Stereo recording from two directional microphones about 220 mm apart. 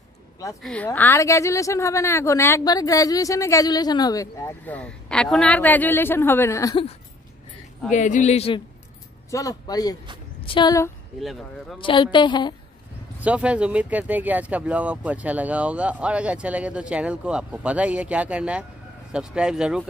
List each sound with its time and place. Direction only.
0.6 s a woman's voice: 5° left (ahead or behind)
7.9 s speech: 35° left (ahead or behind)
9.3 s a woman's voice: 15° left (ahead or behind)
13.2 s speech: 5° right (ahead or behind)